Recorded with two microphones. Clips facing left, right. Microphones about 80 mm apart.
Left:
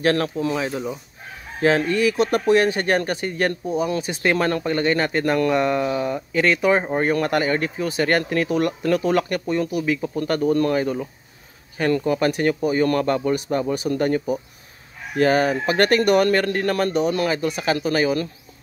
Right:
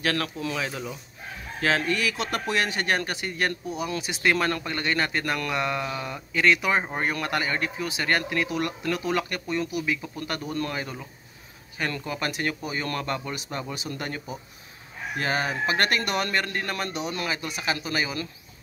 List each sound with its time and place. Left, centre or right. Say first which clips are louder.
0.0 s speech: left 7 dB; left
5.9 s speech: left 9 dB; centre
6.3 s speech: left 4 dB; left
15.4 s speech: left 6 dB; left